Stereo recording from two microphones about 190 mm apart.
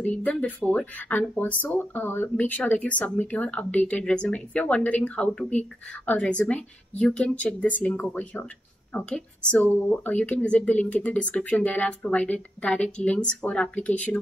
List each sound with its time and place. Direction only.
0.0 s speech: 5° left (ahead or behind)